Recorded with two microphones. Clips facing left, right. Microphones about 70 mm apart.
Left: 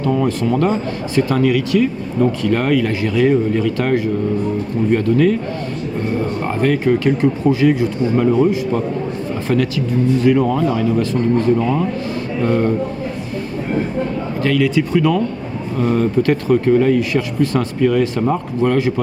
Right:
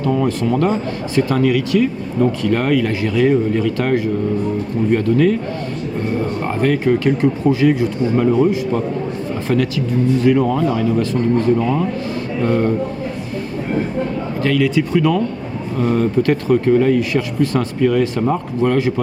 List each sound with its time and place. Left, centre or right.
0.0 s speech: centre
6.1 s speech: centre
10.2 s speech: centre
14.4 s speech: centre